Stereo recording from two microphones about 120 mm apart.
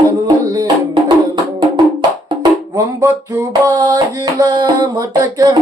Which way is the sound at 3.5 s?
35° right (ahead or behind).